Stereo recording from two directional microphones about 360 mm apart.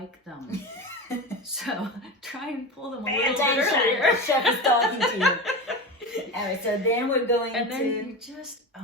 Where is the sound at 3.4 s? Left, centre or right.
Centre.